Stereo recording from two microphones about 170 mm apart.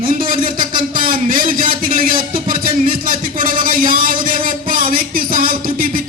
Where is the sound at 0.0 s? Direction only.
55° right (ahead or behind).